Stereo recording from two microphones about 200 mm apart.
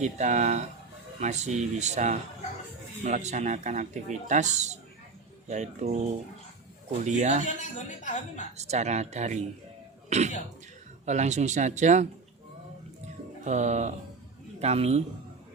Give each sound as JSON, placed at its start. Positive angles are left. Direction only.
{"t": 0.0, "sound": "speech", "side_deg": -35}
{"t": 7.0, "sound": "speech", "side_deg": -35}
{"t": 7.4, "sound": "a woman's voice", "side_deg": 40}
{"t": 8.5, "sound": "speech", "side_deg": -35}
{"t": 13.4, "sound": "speech", "side_deg": -35}